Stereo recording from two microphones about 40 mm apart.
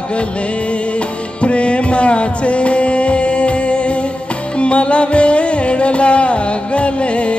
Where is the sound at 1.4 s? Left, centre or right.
Left.